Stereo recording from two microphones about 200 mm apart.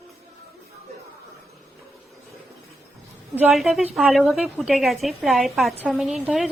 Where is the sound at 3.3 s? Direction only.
5° right (ahead or behind).